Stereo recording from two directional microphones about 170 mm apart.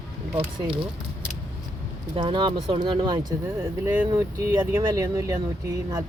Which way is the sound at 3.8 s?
10° right (ahead or behind).